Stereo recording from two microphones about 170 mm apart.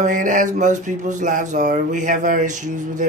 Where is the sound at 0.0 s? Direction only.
50° right (ahead or behind).